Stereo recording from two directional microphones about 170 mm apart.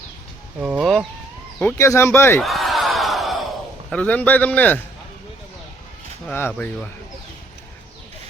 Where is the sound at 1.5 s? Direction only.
15° left (ahead or behind).